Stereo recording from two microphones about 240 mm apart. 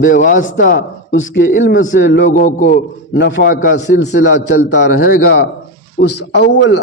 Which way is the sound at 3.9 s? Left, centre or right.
Left.